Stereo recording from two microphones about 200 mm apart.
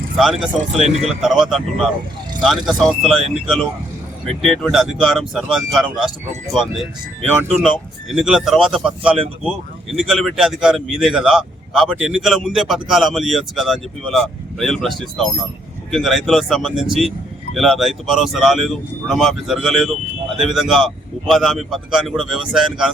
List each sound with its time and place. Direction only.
0.2 s speech: centre (ahead or behind)